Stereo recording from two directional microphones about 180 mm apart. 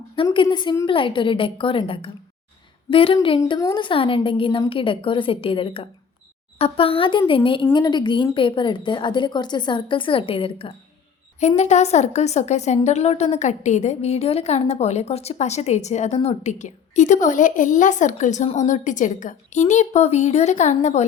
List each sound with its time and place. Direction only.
0.4 s speech: 25° left (ahead or behind)
3.4 s a woman's voice: 20° left (ahead or behind); by 21.0 s 40° left (ahead or behind)